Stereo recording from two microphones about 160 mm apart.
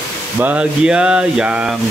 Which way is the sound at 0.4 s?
10° right (ahead or behind).